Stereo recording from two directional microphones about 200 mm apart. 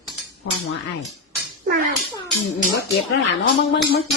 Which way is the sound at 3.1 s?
60° left (ahead or behind).